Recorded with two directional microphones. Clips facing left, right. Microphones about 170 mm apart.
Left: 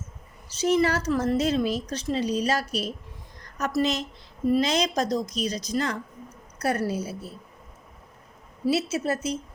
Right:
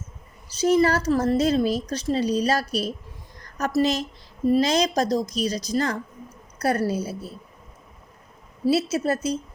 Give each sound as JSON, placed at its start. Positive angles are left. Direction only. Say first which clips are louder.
{"t": 0.6, "sound": "a woman's voice", "louder": "right 3 dB", "side_deg": -40}
{"t": 8.6, "sound": "a woman's voice", "louder": "right 3 dB", "side_deg": -35}